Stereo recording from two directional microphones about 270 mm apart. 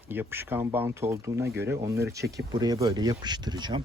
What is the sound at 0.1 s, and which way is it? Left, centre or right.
Speech, centre.